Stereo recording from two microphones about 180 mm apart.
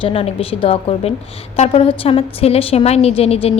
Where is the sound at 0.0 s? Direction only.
30° left (ahead or behind).